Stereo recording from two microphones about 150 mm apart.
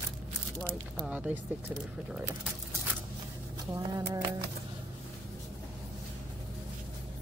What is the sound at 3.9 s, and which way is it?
Speech, 25° right (ahead or behind).